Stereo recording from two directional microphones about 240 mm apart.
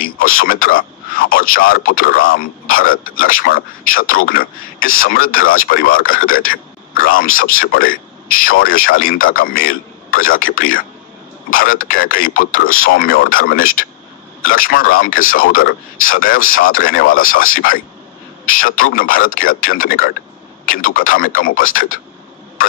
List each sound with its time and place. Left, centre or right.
0.4 s speech: left
12.6 s speech: left
12.9 s speech: left
17.2 s speech: left
17.5 s speech: left